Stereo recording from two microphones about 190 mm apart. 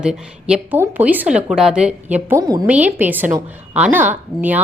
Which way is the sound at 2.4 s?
20° right (ahead or behind).